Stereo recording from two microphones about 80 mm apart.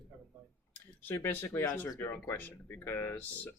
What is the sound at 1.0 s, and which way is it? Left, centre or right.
Speech, left.